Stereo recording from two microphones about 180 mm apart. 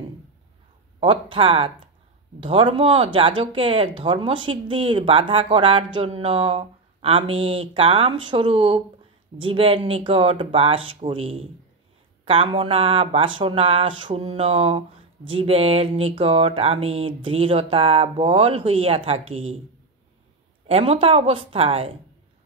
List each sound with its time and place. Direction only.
0.9 s speech: 30° right (ahead or behind)
20.6 s speech: 35° right (ahead or behind)